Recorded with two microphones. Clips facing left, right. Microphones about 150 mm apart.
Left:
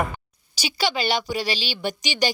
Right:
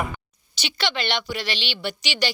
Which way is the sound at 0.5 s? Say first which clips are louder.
Left 3 dB; 10° left (ahead or behind).